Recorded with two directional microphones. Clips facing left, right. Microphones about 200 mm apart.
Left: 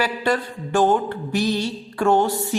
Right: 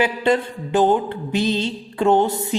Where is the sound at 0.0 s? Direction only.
20° right (ahead or behind).